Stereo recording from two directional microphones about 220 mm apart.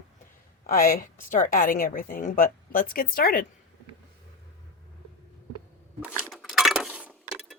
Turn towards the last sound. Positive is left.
turn(degrees=-5)  # may be behind; listen again after turning